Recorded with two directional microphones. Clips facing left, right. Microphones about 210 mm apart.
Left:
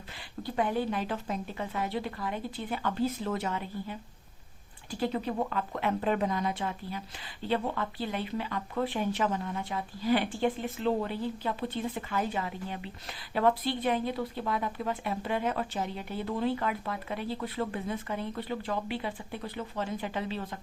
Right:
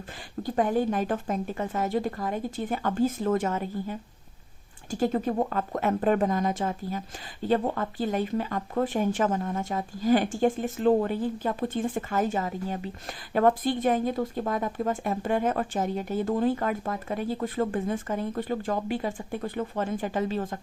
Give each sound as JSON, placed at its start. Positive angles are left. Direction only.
{"t": 0.4, "sound": "speech", "side_deg": -45}